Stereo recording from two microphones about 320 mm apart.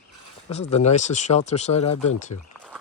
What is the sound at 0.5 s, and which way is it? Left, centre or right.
Speech, centre.